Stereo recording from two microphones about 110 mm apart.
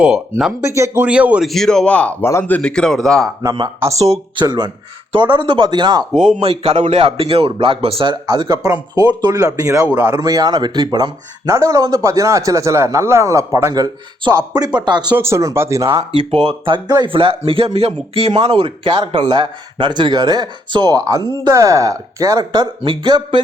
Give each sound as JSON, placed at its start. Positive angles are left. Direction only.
{"t": 0.6, "sound": "speech", "side_deg": -25}
{"t": 1.0, "sound": "a man's voice", "side_deg": -10}
{"t": 1.5, "sound": "a man's voice", "side_deg": 5}
{"t": 3.8, "sound": "speech", "side_deg": -30}
{"t": 4.4, "sound": "speech", "side_deg": -40}
{"t": 6.1, "sound": "a man's voice", "side_deg": -75}
{"t": 8.1, "sound": "speech", "side_deg": -40}
{"t": 9.8, "sound": "a man's voice", "side_deg": -20}
{"t": 10.2, "sound": "speech", "side_deg": -35}
{"t": 15.1, "sound": "speech", "side_deg": -25}
{"t": 15.9, "sound": "a man's voice", "side_deg": -55}